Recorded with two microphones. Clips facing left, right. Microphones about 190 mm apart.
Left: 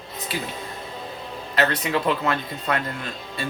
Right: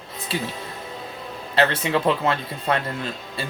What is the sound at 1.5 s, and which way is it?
Speech, 30° right (ahead or behind).